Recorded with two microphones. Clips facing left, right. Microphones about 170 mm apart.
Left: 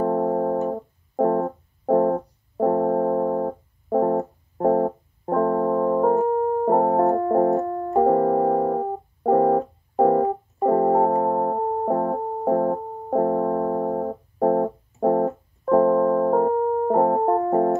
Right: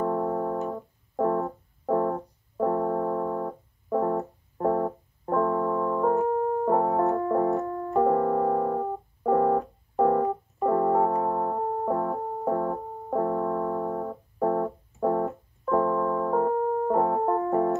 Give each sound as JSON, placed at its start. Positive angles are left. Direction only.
{"t": 0.0, "sound": "music", "side_deg": 40}